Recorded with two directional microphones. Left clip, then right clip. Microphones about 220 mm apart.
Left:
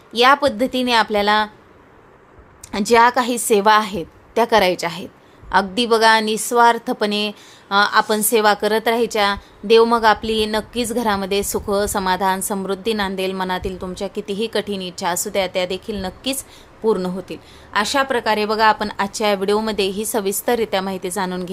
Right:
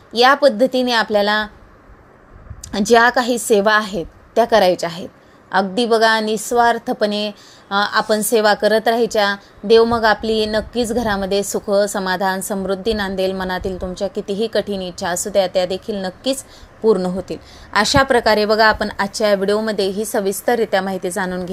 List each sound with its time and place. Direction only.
0.1 s a woman's voice: 5° right (ahead or behind)
2.7 s a woman's voice: 5° right (ahead or behind)